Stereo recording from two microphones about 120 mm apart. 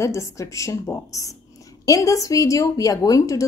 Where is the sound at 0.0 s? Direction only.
25° left (ahead or behind).